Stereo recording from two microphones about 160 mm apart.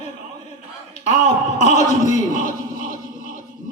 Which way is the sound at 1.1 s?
45° left (ahead or behind).